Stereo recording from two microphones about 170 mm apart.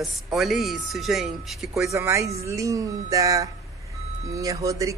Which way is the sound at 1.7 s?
15° right (ahead or behind).